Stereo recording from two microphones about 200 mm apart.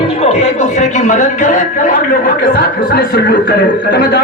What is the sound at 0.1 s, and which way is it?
A man's voice, 30° left (ahead or behind).